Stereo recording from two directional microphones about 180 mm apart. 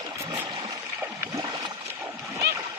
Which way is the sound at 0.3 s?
20° right (ahead or behind).